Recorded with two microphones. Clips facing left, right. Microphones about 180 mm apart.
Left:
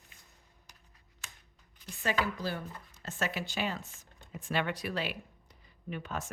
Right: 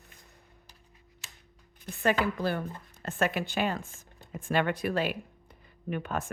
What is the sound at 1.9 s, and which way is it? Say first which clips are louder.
Speech: right 5 dB; 55° right (ahead or behind).